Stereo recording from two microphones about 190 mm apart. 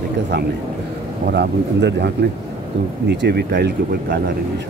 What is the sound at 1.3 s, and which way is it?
Speech, 60° right (ahead or behind).